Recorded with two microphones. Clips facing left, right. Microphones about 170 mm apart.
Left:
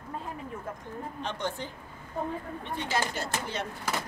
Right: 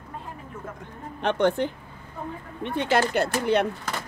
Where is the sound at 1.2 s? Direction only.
65° right (ahead or behind).